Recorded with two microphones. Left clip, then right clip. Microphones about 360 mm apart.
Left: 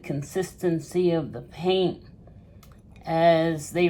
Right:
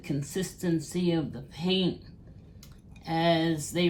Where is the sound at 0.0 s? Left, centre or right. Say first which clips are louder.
Left 4 dB; left.